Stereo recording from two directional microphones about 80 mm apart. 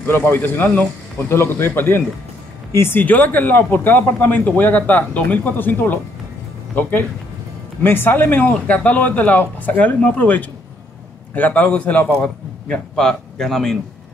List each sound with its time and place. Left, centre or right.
0.0 s a man's voice: left; by 13.7 s centre